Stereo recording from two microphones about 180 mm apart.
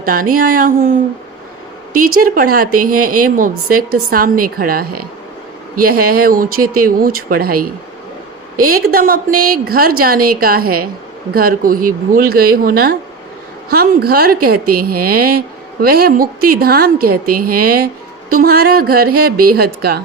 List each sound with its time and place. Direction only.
0.0 s a woman's voice: 50° right (ahead or behind)
2.0 s a woman's voice: 50° right (ahead or behind)